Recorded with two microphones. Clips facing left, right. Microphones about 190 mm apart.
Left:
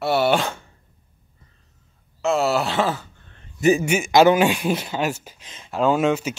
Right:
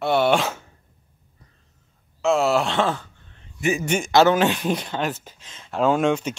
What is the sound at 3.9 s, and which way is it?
Speech, 10° left (ahead or behind).